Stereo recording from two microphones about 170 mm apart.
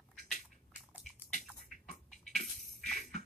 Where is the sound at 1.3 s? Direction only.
40° left (ahead or behind).